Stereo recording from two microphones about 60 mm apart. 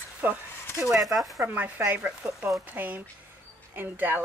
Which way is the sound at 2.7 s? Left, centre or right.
Right.